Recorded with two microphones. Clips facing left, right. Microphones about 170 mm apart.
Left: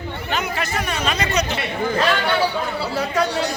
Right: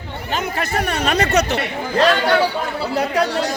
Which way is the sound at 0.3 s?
45° right (ahead or behind).